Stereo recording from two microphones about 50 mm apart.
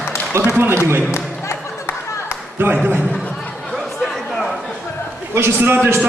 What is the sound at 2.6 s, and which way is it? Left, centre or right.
Speech, right.